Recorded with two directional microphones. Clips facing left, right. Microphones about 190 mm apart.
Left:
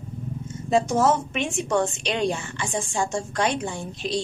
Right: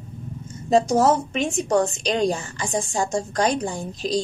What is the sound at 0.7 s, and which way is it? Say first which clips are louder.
A woman's voice: right 3 dB; 40° right (ahead or behind).